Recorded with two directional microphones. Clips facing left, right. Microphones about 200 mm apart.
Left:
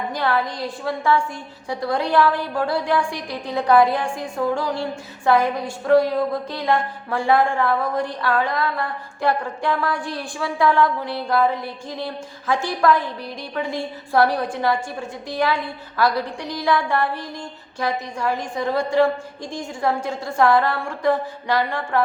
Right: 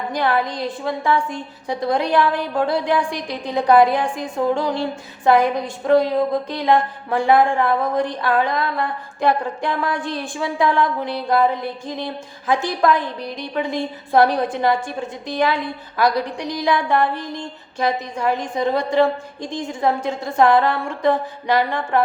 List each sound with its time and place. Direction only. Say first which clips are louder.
0.1 s a woman's voice: right 4 dB; 15° right (ahead or behind)